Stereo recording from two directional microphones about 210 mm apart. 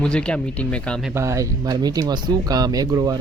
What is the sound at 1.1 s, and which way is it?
Speech, 15° right (ahead or behind).